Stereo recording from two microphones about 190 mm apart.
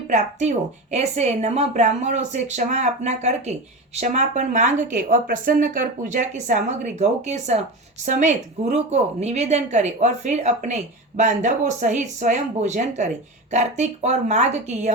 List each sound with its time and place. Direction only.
0.1 s speech: 35° right (ahead or behind)